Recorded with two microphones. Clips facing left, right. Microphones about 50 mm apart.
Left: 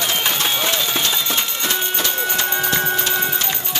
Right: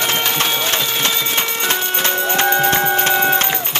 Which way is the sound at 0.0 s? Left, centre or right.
Right.